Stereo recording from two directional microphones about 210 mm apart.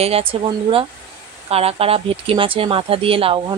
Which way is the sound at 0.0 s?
25° right (ahead or behind).